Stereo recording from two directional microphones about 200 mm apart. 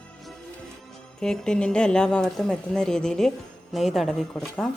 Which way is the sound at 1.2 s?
5° left (ahead or behind).